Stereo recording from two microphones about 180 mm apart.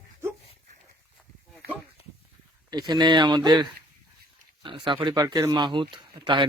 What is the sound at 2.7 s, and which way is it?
Speech, 25° right (ahead or behind).